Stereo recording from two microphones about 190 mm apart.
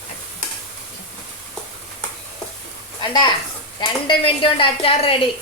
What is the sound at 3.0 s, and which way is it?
A woman's voice, 25° left (ahead or behind).